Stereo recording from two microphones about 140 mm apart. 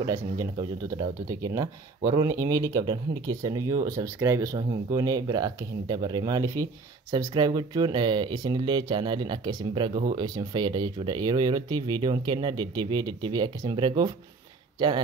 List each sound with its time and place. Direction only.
0.0 s speech: 20° right (ahead or behind)